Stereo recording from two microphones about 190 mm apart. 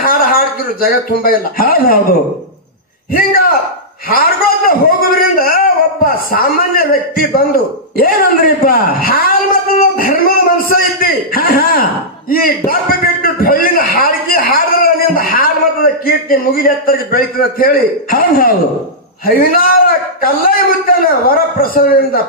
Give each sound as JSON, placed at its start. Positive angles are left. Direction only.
{"t": 0.0, "sound": "a man's voice", "side_deg": 50}
{"t": 3.1, "sound": "a man's voice", "side_deg": 50}
{"t": 9.8, "sound": "a sound", "side_deg": 50}
{"t": 19.2, "sound": "a man's voice", "side_deg": 50}